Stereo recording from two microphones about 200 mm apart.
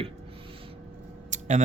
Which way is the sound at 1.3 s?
35° right (ahead or behind).